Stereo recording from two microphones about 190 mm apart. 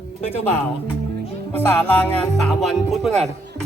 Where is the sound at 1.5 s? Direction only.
10° left (ahead or behind).